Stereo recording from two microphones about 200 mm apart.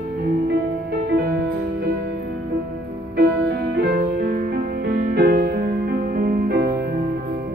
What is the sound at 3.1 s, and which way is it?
Music, 50° right (ahead or behind).